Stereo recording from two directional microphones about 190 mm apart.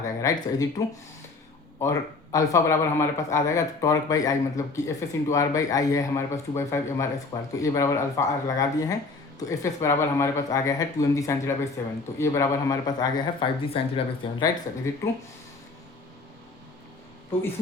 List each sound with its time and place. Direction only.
0.0 s a man's voice: 20° left (ahead or behind)
1.8 s a man's voice: 15° left (ahead or behind)
14.9 s a man's voice: 15° left (ahead or behind)